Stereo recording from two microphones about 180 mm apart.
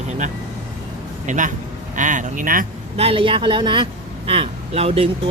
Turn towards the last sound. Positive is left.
turn(degrees=-35)  # may be behind; listen again after turning